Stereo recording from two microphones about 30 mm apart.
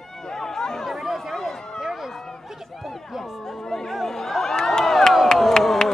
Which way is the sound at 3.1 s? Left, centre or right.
Centre.